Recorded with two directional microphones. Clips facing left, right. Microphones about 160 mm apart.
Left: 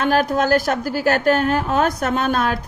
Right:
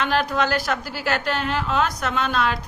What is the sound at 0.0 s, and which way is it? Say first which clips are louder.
Speech: left 4 dB; 45° left (ahead or behind).